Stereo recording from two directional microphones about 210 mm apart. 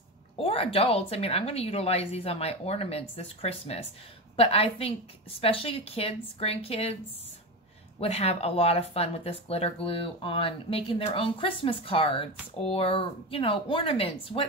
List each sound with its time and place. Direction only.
0.4 s speech: 25° left (ahead or behind)
8.0 s speech: 30° left (ahead or behind)